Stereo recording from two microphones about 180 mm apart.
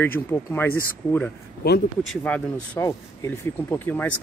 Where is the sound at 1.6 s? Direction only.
60° left (ahead or behind).